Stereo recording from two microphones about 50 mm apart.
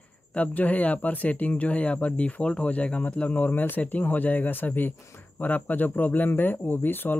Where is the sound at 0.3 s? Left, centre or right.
Left.